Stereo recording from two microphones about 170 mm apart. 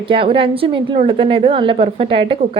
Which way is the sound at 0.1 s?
30° right (ahead or behind).